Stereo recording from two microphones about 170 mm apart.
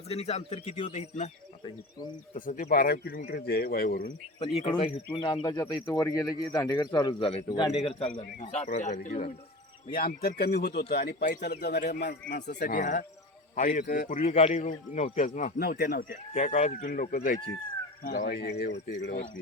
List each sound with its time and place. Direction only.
0.1 s speech: 35° left (ahead or behind)
1.6 s a man's voice: 25° left (ahead or behind)
2.5 s speech: 55° left (ahead or behind)
4.4 s a man's voice: 35° left (ahead or behind)
8.1 s a man's voice: 50° left (ahead or behind); by 12.1 s 80° left
12.6 s a man's voice: 50° left (ahead or behind)
15.5 s speech: 65° left (ahead or behind)
16.3 s a man's voice: 40° left (ahead or behind); by 19.3 s 90° left